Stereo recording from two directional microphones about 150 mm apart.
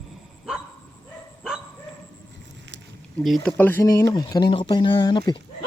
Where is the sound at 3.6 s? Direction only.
15° left (ahead or behind).